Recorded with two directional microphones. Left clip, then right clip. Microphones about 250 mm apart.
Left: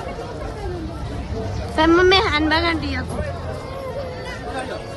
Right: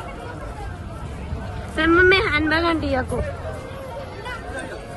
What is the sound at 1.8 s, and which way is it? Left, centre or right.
A woman's voice, centre.